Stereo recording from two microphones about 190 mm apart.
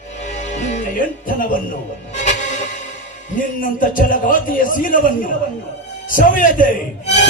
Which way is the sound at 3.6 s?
45° left (ahead or behind).